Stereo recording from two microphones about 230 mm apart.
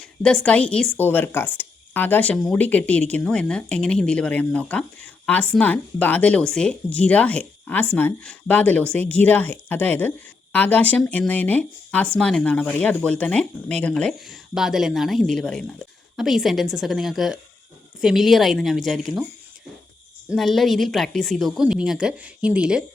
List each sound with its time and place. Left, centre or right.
0.2 s a woman's voice: centre
20.3 s speech: centre